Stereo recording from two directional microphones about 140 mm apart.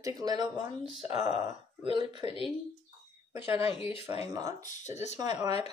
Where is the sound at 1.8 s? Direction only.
35° right (ahead or behind).